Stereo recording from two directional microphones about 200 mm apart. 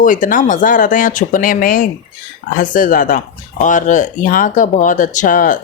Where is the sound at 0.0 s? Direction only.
40° left (ahead or behind).